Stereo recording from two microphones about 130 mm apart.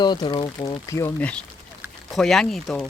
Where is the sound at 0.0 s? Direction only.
35° left (ahead or behind).